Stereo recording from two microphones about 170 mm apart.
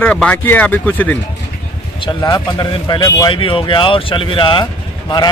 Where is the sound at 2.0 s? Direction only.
25° left (ahead or behind).